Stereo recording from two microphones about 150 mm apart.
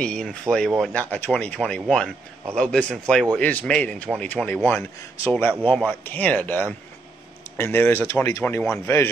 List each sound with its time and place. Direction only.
0.0 s speech: 5° left (ahead or behind)